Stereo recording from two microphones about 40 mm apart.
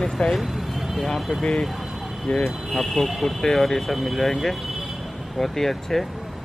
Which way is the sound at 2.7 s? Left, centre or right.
Centre.